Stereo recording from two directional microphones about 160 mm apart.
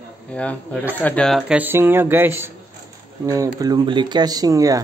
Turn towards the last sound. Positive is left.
turn(degrees=-20)  # may be behind; listen again after turning